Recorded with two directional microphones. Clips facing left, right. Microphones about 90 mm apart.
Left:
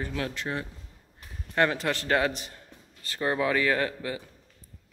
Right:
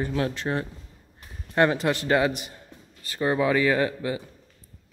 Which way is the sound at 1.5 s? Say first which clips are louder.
Right 4 dB; 20° right (ahead or behind).